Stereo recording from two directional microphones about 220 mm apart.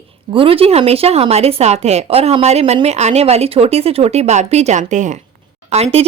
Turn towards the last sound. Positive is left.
turn(degrees=-30)  # may be behind; listen again after turning